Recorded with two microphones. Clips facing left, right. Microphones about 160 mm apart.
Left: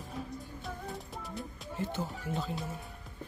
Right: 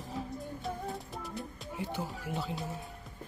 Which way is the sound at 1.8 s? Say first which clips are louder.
Left 1 dB; 15° right (ahead or behind).